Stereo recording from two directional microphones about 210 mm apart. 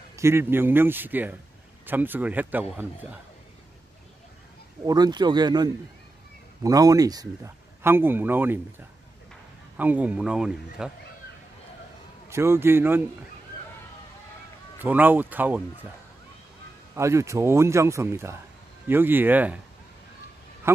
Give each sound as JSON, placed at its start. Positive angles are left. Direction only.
{"t": 0.1, "sound": "speech", "side_deg": -10}
{"t": 4.8, "sound": "a man's voice", "side_deg": -20}
{"t": 12.3, "sound": "speech", "side_deg": -10}
{"t": 14.8, "sound": "speech", "side_deg": -10}
{"t": 16.9, "sound": "speech", "side_deg": -15}
{"t": 20.7, "sound": "a man's voice", "side_deg": -15}